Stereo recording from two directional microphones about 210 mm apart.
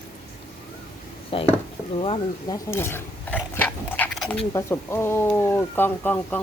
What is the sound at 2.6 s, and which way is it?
Speech, 10° left (ahead or behind).